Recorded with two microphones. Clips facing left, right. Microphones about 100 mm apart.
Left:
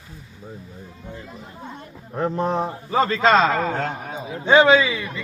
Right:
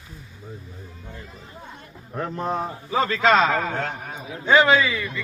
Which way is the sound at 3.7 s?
45° left (ahead or behind).